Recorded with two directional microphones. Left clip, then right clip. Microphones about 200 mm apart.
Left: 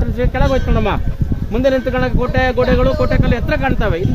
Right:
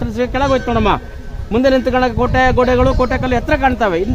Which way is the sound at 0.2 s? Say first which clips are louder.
Right 2 dB; 50° right (ahead or behind).